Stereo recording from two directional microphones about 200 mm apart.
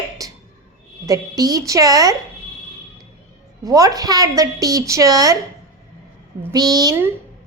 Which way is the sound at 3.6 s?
15° right (ahead or behind).